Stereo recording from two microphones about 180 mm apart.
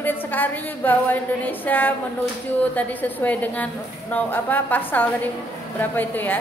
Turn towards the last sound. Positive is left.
turn(degrees=10)  # may be behind; listen again after turning